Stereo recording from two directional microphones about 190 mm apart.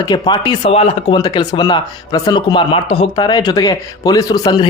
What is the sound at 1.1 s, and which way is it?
Speech, 20° left (ahead or behind).